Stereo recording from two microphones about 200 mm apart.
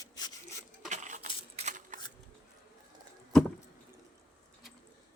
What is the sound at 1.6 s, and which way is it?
Shuffling cards, 35° right (ahead or behind).